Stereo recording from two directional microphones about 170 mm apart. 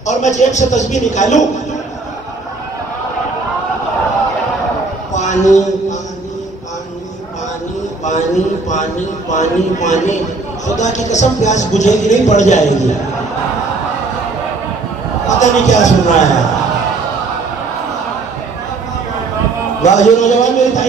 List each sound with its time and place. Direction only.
0.0 s speech: 45° left (ahead or behind)
5.1 s speech: 45° left (ahead or behind)
9.3 s speech: 45° left (ahead or behind)
15.2 s speech: 45° left (ahead or behind)
19.8 s speech: 45° left (ahead or behind)